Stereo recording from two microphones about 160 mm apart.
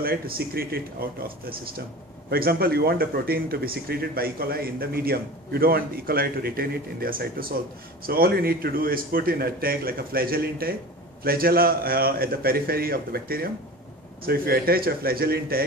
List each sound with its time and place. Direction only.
0.0 s speech: 70° right (ahead or behind)